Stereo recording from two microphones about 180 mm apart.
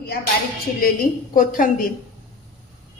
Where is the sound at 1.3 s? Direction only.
50° left (ahead or behind).